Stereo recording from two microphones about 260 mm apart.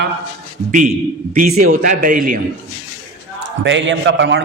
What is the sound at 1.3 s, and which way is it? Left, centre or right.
A man's voice, right.